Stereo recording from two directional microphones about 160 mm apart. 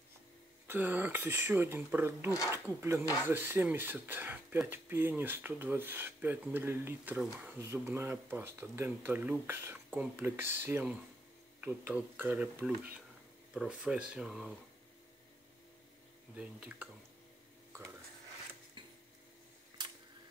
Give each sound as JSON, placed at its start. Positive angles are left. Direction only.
{"t": 0.7, "sound": "speech", "side_deg": -10}
{"t": 16.3, "sound": "speech", "side_deg": -5}
{"t": 18.8, "sound": "a sound", "side_deg": -30}